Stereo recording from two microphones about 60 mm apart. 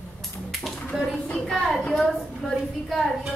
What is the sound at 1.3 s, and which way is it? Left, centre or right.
A woman's voice, centre.